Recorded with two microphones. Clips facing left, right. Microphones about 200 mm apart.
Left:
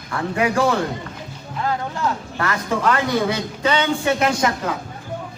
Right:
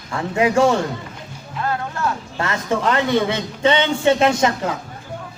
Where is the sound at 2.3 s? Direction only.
25° right (ahead or behind).